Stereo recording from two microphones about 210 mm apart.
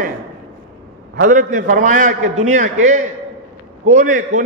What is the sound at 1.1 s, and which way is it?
A man's voice, 40° right (ahead or behind).